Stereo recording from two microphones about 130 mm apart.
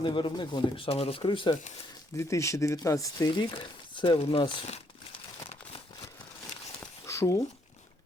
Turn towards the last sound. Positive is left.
turn(degrees=25)  # may be behind; listen again after turning